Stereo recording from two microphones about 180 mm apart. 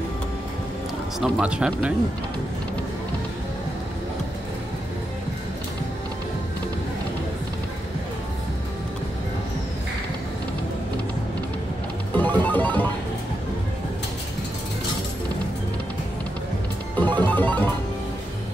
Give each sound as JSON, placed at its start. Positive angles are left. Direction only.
{"t": 1.2, "sound": "speech", "side_deg": -5}
{"t": 12.2, "sound": "music", "side_deg": 10}
{"t": 16.9, "sound": "music", "side_deg": 10}